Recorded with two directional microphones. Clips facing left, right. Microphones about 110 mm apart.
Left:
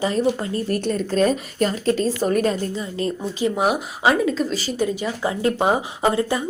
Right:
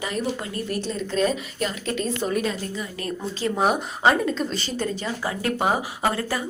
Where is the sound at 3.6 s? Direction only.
5° left (ahead or behind).